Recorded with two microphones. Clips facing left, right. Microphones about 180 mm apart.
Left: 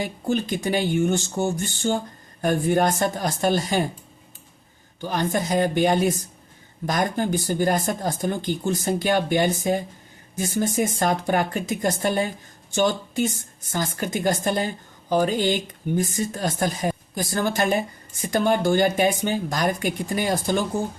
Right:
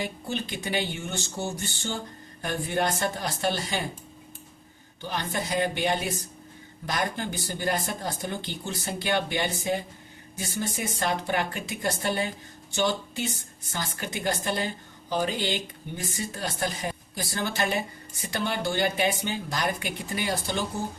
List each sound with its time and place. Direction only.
0.0 s speech: 45° left (ahead or behind)
4.9 s speech: 45° left (ahead or behind)